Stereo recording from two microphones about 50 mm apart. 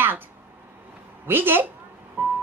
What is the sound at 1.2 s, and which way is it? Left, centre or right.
Speech, right.